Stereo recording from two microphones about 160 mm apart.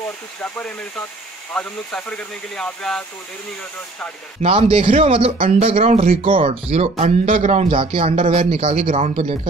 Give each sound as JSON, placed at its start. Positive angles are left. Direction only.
{"t": 0.4, "sound": "speech", "side_deg": 10}
{"t": 4.4, "sound": "speech", "side_deg": -35}